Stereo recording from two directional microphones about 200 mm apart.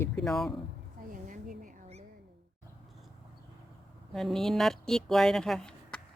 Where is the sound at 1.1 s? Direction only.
40° right (ahead or behind).